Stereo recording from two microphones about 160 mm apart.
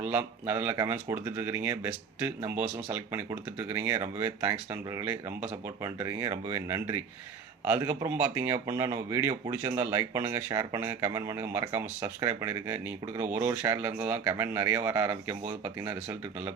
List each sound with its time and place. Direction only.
0.0 s speech: 10° right (ahead or behind)